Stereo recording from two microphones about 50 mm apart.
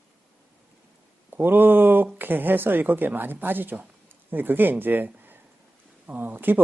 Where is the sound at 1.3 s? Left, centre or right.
Right.